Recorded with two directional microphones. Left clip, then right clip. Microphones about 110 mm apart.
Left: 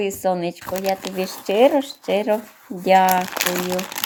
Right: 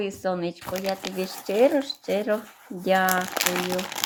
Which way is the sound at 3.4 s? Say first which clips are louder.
Left 3 dB; 10° right (ahead or behind).